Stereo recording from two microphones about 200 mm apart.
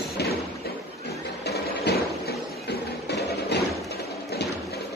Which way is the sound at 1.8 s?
55° left (ahead or behind).